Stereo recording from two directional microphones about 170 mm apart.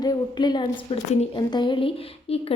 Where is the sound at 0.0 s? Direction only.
25° left (ahead or behind).